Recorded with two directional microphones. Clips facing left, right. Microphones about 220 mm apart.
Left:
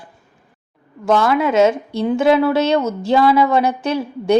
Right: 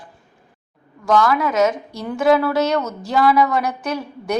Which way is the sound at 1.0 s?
25° left (ahead or behind).